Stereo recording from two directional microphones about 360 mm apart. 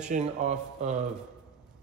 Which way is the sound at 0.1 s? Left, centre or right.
Centre.